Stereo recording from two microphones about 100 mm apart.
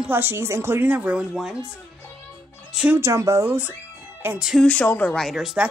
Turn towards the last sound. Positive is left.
turn(degrees=-5)  # may be behind; listen again after turning